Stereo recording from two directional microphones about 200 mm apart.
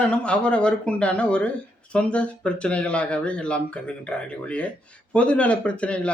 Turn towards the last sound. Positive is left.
turn(degrees=5)  # may be behind; listen again after turning